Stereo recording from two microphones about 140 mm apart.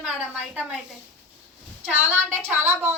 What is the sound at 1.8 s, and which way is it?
A woman's voice, 10° right (ahead or behind).